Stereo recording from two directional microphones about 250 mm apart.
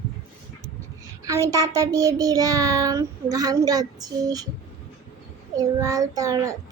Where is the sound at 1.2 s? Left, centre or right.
Centre.